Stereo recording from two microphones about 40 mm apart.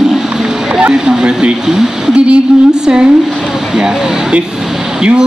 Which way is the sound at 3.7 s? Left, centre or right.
Centre.